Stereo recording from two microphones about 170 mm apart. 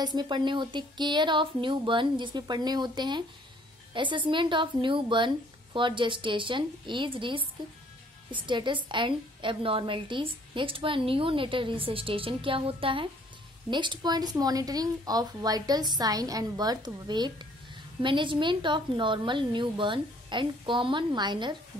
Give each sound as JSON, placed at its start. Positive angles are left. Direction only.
{"t": 0.0, "sound": "a woman's voice", "side_deg": -25}